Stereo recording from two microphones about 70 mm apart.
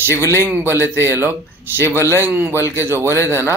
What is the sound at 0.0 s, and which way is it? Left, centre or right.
A man's voice, right.